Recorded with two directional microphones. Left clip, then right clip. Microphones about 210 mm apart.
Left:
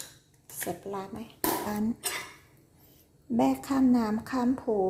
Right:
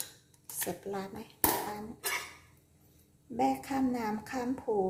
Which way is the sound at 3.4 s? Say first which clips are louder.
Left 4 dB; 30° left (ahead or behind).